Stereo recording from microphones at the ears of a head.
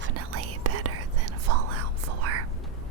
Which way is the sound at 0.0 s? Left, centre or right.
Right.